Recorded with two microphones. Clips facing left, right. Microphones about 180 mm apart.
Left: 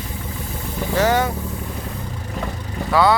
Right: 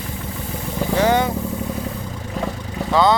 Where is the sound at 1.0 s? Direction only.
20° right (ahead or behind).